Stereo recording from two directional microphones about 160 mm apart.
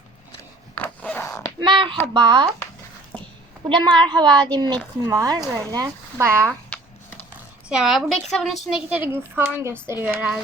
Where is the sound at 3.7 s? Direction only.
30° right (ahead or behind).